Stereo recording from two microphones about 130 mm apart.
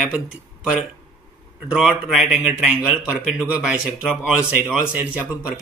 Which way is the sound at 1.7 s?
5° right (ahead or behind).